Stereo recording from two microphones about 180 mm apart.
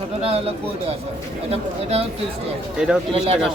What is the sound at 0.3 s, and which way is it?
Speech, 35° right (ahead or behind).